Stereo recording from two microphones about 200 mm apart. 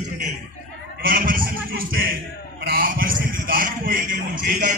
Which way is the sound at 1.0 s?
45° right (ahead or behind).